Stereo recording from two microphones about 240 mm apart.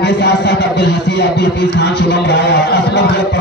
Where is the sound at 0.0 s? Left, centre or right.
Left.